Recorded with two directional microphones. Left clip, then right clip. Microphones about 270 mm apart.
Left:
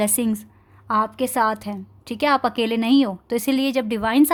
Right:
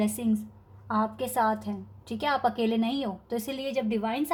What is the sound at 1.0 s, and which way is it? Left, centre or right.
Speech, left.